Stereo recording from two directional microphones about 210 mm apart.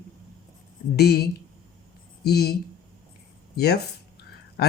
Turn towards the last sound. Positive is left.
turn(degrees=50)  # may be behind; listen again after turning